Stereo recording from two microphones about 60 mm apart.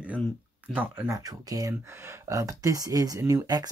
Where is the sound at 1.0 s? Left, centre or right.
Right.